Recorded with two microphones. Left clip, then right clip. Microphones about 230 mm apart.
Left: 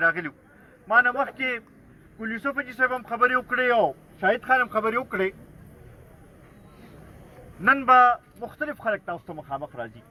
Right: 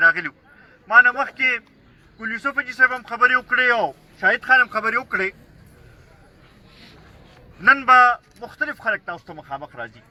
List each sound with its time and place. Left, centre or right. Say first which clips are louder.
0.0 s speech: right 7 dB; centre
7.6 s speech: right 4 dB; centre